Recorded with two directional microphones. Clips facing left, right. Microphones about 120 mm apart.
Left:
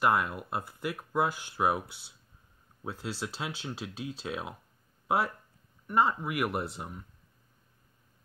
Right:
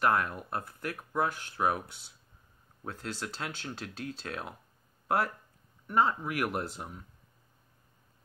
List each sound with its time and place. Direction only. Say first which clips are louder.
0.0 s speech: left 1 dB; 5° left (ahead or behind)
5.0 s a sound: left 1 dB; centre (ahead or behind)
5.9 s speech: left 1 dB; centre (ahead or behind)